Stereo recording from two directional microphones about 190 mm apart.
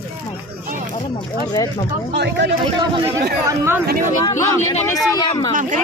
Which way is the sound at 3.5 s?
10° right (ahead or behind).